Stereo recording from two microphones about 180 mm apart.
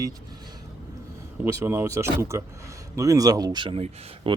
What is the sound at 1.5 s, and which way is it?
Speech, 15° right (ahead or behind).